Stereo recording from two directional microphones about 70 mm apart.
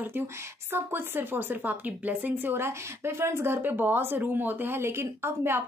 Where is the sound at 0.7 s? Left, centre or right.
Right.